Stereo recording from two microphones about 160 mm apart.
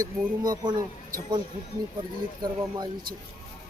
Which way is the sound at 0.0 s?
25° right (ahead or behind).